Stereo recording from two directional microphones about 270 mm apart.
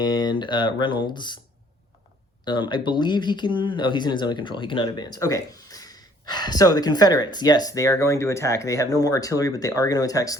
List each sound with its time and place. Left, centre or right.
0.0 s speech: centre
2.4 s speech: centre